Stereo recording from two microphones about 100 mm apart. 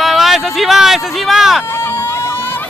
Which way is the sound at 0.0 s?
Centre (ahead or behind).